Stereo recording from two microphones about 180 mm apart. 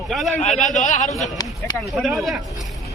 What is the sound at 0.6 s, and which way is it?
Speech, 40° left (ahead or behind).